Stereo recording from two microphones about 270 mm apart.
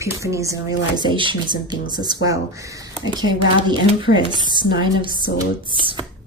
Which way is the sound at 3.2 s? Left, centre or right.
Centre.